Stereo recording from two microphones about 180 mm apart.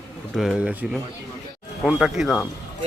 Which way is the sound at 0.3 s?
5° right (ahead or behind).